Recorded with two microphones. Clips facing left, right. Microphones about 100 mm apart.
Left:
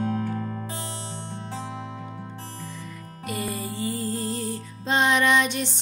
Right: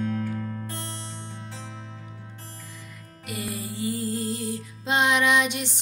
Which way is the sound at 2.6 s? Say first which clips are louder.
Left 6 dB; 5° right (ahead or behind).